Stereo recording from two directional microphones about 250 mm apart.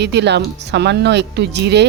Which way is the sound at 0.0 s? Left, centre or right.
Right.